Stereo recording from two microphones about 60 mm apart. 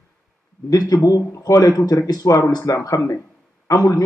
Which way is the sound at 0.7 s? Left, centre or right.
Left.